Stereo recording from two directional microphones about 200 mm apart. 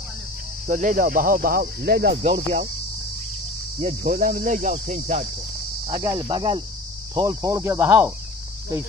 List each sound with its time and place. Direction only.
0.7 s speech: 40° right (ahead or behind)
4.0 s speech: 45° right (ahead or behind)
5.9 s speech: 25° right (ahead or behind)